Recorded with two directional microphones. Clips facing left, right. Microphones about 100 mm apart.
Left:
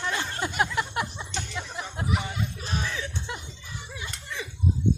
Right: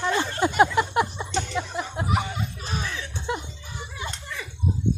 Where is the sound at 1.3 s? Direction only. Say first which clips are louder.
Right 7 dB; 30° right (ahead or behind).